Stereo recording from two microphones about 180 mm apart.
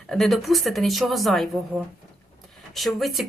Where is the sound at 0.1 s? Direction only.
Centre (ahead or behind).